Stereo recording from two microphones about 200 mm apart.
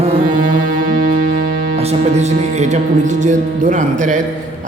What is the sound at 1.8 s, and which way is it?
Music, 30° right (ahead or behind).